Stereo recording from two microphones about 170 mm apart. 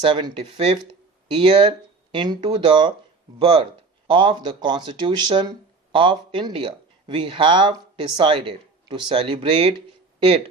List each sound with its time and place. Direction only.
0.1 s speech: 30° right (ahead or behind)